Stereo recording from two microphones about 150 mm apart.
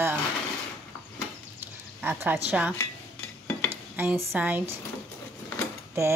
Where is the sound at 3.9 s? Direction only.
15° right (ahead or behind).